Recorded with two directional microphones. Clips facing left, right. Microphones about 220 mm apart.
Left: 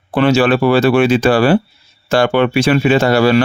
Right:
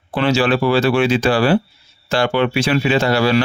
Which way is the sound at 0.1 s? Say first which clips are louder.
Left 4 dB; 50° left (ahead or behind).